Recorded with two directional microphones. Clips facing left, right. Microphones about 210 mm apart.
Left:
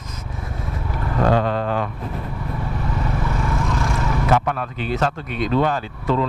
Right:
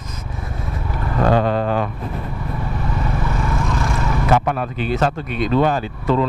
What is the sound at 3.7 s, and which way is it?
Speech, 15° right (ahead or behind).